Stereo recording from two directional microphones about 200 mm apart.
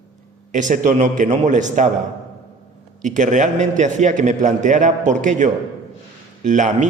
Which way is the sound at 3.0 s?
40° right (ahead or behind).